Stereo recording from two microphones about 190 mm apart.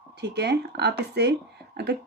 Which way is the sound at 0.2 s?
60° right (ahead or behind).